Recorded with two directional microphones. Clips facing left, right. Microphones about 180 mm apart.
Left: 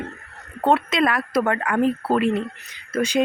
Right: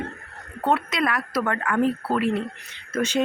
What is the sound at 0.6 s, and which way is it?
Speech, 25° left (ahead or behind).